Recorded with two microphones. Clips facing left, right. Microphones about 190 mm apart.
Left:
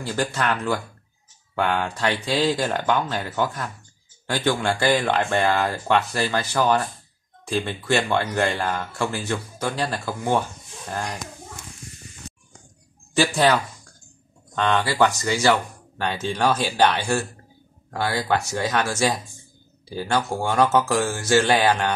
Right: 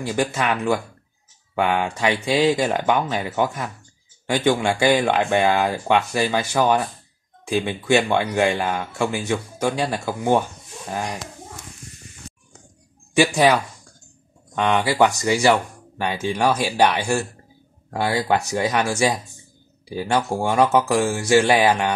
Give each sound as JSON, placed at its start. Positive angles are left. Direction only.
{"t": 0.0, "sound": "speech", "side_deg": -15}
{"t": 13.1, "sound": "speech", "side_deg": -15}